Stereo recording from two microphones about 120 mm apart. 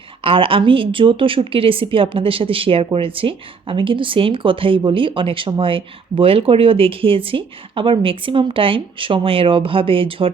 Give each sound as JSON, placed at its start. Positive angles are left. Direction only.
{"t": 0.2, "sound": "a woman's voice", "side_deg": -45}